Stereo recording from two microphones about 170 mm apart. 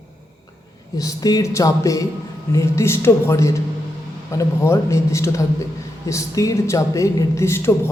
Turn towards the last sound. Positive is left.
turn(degrees=15)  # may be behind; listen again after turning